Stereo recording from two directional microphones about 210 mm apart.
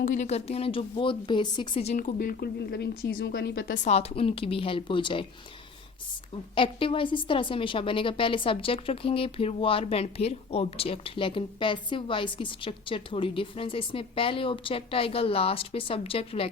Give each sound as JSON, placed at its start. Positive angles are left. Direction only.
{"t": 0.0, "sound": "a woman's voice", "side_deg": 35}
{"t": 3.8, "sound": "a woman's voice", "side_deg": 30}
{"t": 6.6, "sound": "a woman's voice", "side_deg": 25}